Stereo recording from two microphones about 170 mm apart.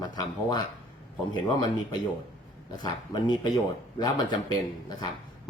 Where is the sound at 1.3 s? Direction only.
25° left (ahead or behind).